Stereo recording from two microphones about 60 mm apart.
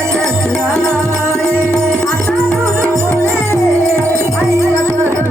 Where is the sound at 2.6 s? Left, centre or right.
Right.